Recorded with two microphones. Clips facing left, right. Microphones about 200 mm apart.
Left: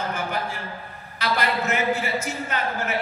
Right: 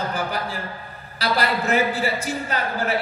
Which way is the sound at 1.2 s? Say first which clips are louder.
Right 2 dB; 35° right (ahead or behind).